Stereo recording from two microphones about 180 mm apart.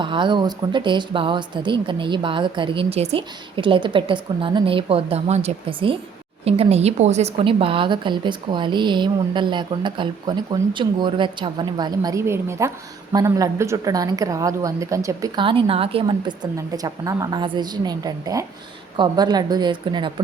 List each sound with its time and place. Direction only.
0.0 s a woman's voice: 25° right (ahead or behind)